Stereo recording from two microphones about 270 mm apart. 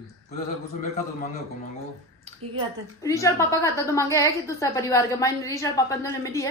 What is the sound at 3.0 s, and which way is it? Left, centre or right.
A woman's voice, centre.